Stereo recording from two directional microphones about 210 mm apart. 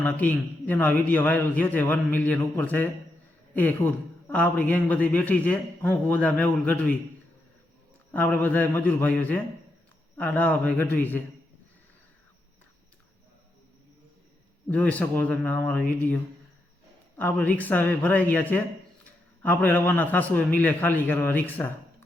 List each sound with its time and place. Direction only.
0.0 s a woman's voice: 10° left (ahead or behind)
8.1 s a woman's voice: 10° left (ahead or behind)
14.7 s a woman's voice: 5° left (ahead or behind)